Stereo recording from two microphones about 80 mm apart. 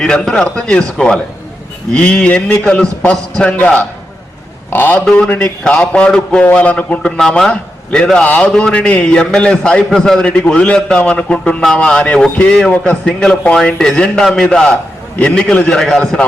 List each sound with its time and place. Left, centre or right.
0.0 s a man's voice: centre
7.2 s a man's voice: centre